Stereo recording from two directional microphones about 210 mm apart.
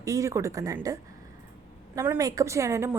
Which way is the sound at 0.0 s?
15° right (ahead or behind).